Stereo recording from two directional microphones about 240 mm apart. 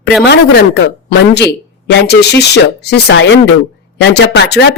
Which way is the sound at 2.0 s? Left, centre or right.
Left.